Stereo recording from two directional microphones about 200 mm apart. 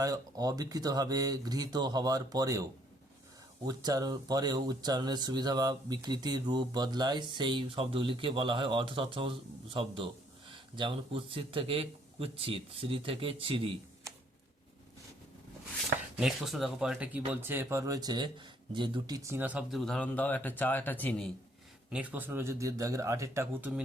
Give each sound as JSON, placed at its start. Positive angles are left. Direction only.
{"t": 0.0, "sound": "speech", "side_deg": -20}
{"t": 3.7, "sound": "speech", "side_deg": -20}
{"t": 16.1, "sound": "speech", "side_deg": 0}
{"t": 21.8, "sound": "speech", "side_deg": -5}